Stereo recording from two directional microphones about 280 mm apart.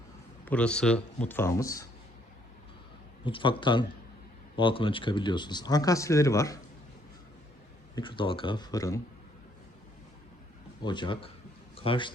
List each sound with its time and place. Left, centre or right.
0.4 s speech: centre
3.2 s speech: centre
7.9 s speech: centre
10.8 s a man's voice: centre